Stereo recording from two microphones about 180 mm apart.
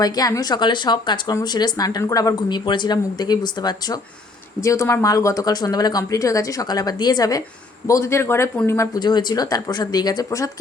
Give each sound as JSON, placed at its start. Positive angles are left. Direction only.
{"t": 0.0, "sound": "speech", "side_deg": 20}